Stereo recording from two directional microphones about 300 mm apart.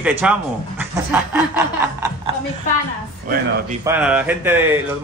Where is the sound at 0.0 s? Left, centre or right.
Centre.